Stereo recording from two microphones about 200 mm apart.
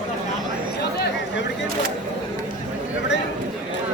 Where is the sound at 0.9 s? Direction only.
55° left (ahead or behind).